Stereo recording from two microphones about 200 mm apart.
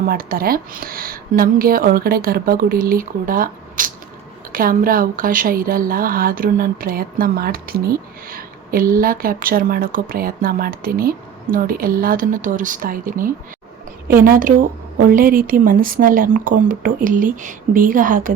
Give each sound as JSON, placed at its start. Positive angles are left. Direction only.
{"t": 0.1, "sound": "a woman's voice", "side_deg": -45}